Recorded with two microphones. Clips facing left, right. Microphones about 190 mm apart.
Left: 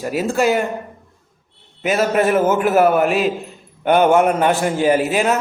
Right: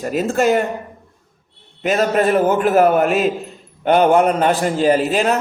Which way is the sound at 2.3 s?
15° right (ahead or behind).